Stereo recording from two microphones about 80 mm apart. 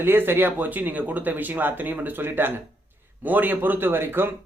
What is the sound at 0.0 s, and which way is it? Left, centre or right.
Speech, right.